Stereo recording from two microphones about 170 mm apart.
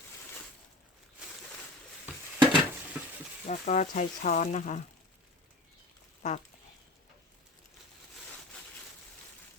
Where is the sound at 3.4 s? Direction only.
45° left (ahead or behind).